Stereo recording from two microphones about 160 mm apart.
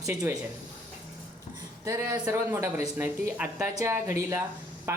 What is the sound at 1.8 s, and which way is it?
A woman's voice, 15° right (ahead or behind).